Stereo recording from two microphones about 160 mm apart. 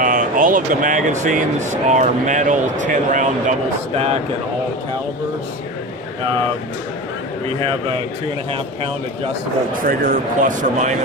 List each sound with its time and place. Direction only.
0.0 s speech: 55° right (ahead or behind)
9.8 s speech: 55° right (ahead or behind)